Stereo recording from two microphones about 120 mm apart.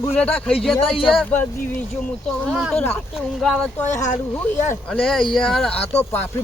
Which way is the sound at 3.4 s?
5° left (ahead or behind).